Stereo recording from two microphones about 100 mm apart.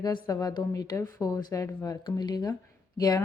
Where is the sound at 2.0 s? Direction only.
45° left (ahead or behind).